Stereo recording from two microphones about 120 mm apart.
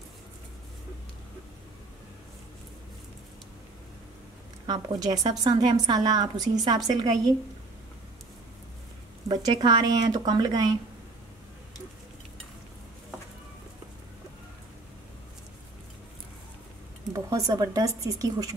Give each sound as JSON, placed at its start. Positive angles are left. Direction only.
{"t": 4.6, "sound": "a woman's voice", "side_deg": -35}
{"t": 9.3, "sound": "a woman's voice", "side_deg": -35}
{"t": 17.1, "sound": "speech", "side_deg": -30}